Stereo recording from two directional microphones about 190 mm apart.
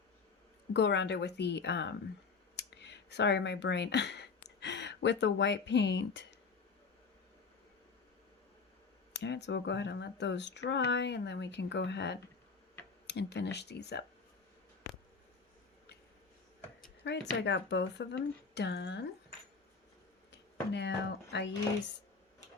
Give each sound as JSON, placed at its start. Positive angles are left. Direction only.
{"t": 0.7, "sound": "speech", "side_deg": 65}
{"t": 2.6, "sound": "a sound", "side_deg": 65}
{"t": 4.4, "sound": "speech", "side_deg": 65}
{"t": 9.1, "sound": "speech", "side_deg": 65}
{"t": 14.8, "sound": "a sound", "side_deg": 85}
{"t": 17.0, "sound": "speech", "side_deg": 65}
{"t": 20.3, "sound": "speech", "side_deg": 65}